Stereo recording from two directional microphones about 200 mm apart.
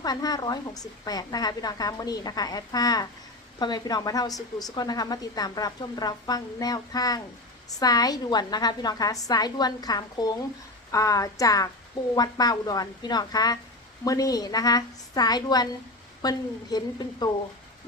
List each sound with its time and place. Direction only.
0.0 s a woman's voice: 20° left (ahead or behind)